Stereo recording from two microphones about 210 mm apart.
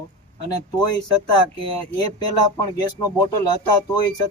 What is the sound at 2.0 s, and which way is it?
Speech, 20° left (ahead or behind).